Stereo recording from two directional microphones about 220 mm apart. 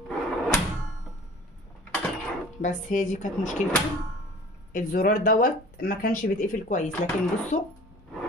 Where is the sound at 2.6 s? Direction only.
35° left (ahead or behind).